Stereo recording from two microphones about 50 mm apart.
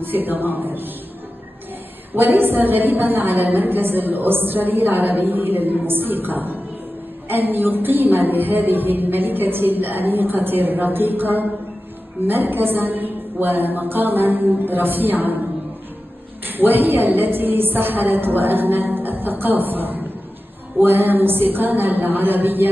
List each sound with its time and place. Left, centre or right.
0.0 s a woman's voice: right
2.1 s a woman's voice: right
16.4 s a woman's voice: right